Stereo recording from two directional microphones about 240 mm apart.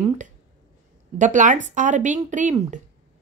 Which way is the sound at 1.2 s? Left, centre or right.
Right.